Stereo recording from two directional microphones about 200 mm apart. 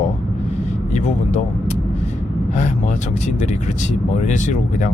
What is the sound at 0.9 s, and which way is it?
Speech, 35° left (ahead or behind).